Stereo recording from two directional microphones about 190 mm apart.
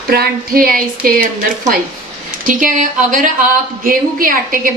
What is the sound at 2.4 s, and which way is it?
A woman's voice, 45° right (ahead or behind).